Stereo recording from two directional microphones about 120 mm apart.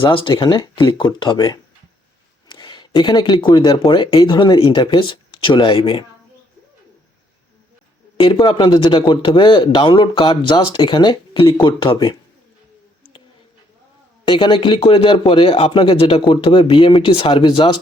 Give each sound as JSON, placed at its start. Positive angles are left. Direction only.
{"t": 0.0, "sound": "speech", "side_deg": 45}
{"t": 8.2, "sound": "speech", "side_deg": 45}
{"t": 14.3, "sound": "speech", "side_deg": 45}